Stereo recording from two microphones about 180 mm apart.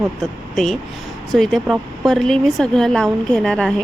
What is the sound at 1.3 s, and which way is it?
Speech, centre (ahead or behind).